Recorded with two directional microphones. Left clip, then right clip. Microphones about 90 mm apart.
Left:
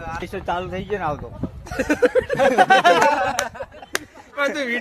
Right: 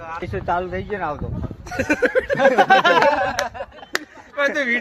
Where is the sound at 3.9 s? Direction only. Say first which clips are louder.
Right 1 dB; 10° left (ahead or behind).